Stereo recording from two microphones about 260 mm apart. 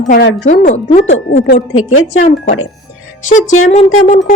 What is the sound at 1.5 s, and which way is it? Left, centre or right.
Speech, left.